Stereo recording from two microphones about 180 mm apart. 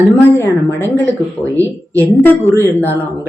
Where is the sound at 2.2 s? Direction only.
10° left (ahead or behind).